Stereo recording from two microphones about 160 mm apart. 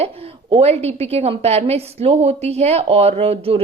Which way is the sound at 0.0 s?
40° right (ahead or behind).